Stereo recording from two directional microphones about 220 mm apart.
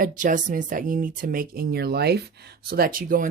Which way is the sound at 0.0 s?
35° right (ahead or behind).